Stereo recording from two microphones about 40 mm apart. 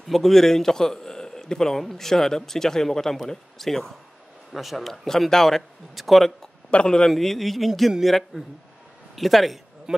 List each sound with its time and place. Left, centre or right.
0.1 s a man's voice: centre
6.7 s speech: left
7.1 s speech: centre
9.9 s a sound: centre